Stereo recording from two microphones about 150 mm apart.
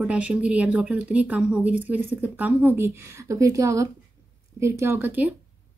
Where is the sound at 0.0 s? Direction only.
5° right (ahead or behind).